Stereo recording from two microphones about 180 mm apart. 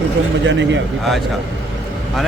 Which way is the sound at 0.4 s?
90° right.